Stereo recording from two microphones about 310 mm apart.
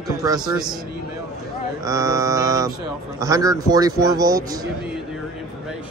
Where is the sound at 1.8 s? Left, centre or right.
Centre.